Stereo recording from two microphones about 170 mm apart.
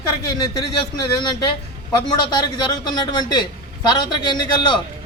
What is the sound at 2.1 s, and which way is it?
Speech, 25° left (ahead or behind).